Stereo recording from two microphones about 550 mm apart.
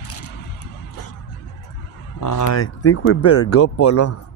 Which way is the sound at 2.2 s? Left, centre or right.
Left.